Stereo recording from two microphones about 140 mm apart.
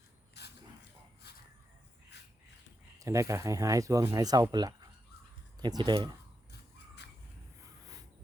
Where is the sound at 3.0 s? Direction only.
20° right (ahead or behind).